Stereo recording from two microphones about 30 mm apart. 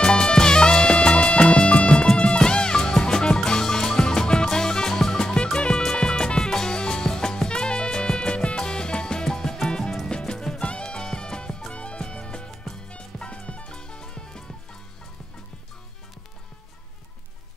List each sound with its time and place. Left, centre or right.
0.0 s music: left
0.9 s music: left
10.6 s music: left
13.7 s music: left